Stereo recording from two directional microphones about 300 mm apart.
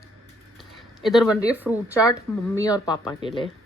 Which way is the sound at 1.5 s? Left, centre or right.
Centre.